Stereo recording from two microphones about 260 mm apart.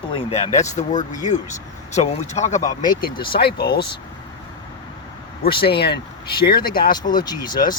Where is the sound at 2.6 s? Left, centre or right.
Centre.